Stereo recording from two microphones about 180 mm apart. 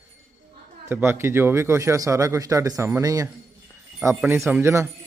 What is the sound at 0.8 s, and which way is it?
Speech, 10° right (ahead or behind).